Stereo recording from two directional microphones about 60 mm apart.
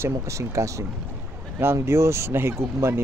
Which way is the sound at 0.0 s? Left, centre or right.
Right.